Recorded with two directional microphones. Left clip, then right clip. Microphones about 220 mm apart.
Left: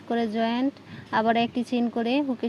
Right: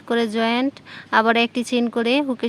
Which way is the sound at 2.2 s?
40° right (ahead or behind).